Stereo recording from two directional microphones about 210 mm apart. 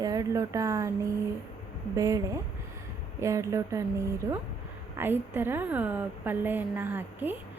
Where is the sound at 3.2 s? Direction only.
15° right (ahead or behind).